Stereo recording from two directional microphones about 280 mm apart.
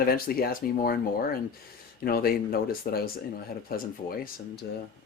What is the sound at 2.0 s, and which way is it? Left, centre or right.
Speech, left.